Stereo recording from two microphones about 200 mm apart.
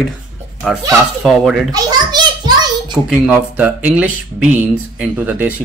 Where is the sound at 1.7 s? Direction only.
20° right (ahead or behind).